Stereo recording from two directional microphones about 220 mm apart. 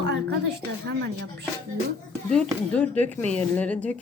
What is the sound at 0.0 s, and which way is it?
Speech, 50° right (ahead or behind).